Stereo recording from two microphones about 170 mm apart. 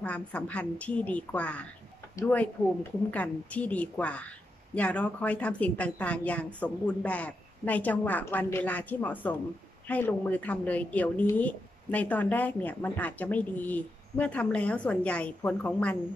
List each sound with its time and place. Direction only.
0.0 s speech: 10° left (ahead or behind)